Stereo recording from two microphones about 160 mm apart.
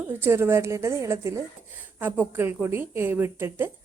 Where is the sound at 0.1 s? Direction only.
15° right (ahead or behind).